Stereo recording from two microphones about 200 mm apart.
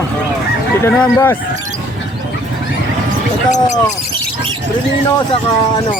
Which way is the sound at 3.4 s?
35° left (ahead or behind).